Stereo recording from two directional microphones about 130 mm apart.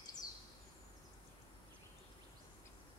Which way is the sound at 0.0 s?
30° left (ahead or behind).